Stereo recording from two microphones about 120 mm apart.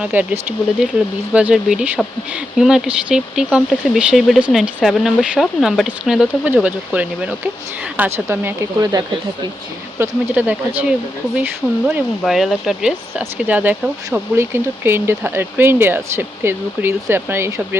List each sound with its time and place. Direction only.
0.0 s speech: 10° right (ahead or behind)
8.8 s speech: 30° right (ahead or behind)
10.0 s speech: 15° right (ahead or behind)
12.2 s speech: centre (ahead or behind); by 17.7 s 20° right (ahead or behind)